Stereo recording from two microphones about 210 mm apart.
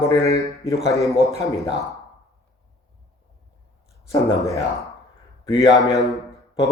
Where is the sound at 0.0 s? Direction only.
15° left (ahead or behind).